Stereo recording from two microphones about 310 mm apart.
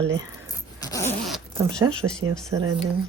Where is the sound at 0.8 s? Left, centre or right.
Centre.